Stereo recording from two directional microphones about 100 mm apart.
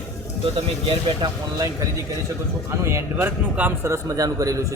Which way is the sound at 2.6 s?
25° right (ahead or behind).